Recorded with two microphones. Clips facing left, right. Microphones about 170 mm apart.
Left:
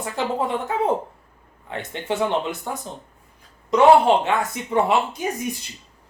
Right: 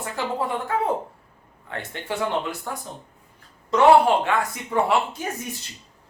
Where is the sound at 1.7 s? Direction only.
20° left (ahead or behind).